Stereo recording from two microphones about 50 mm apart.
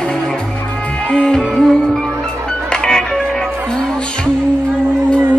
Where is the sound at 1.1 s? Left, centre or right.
Centre.